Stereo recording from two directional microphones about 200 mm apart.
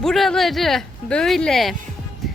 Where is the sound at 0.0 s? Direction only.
Centre (ahead or behind).